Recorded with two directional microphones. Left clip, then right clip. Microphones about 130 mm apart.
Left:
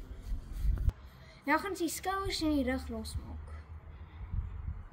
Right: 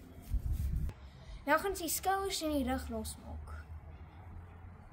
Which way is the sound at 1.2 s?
45° right (ahead or behind).